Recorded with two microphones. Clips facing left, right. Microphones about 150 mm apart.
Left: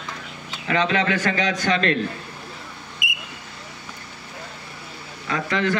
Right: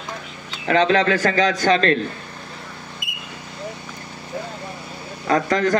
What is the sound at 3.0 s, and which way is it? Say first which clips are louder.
Vehicle: left 5 dB; 80° left.